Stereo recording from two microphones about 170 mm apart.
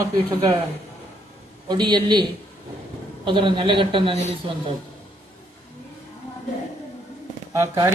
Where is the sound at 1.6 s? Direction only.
25° right (ahead or behind).